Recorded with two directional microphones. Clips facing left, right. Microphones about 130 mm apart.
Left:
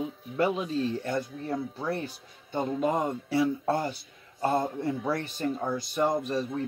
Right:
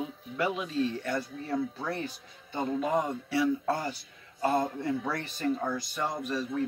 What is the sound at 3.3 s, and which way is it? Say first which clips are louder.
A man's voice: left 1 dB; 35° left (ahead or behind).